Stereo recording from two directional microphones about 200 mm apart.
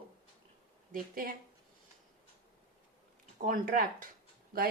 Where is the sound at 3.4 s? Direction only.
45° right (ahead or behind).